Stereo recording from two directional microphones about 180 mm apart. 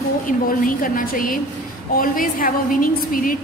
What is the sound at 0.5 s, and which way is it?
A woman's voice, 50° left (ahead or behind).